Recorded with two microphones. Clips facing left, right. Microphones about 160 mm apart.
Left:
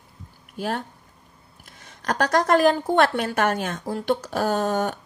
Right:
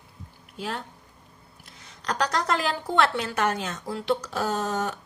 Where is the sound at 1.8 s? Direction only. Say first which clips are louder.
Left 3 dB; 50° left (ahead or behind).